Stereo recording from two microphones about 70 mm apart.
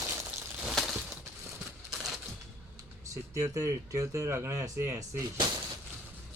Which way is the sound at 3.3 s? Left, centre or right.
Right.